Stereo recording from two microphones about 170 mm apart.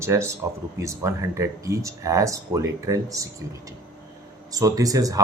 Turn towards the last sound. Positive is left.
turn(degrees=-20)  # may be behind; listen again after turning